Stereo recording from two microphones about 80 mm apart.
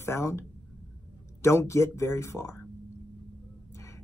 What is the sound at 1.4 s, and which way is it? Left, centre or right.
Speech, left.